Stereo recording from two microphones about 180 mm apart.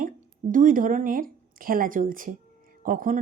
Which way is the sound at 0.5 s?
50° right (ahead or behind).